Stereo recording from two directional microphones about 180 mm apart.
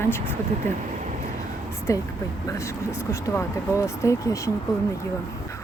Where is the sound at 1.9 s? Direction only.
15° left (ahead or behind).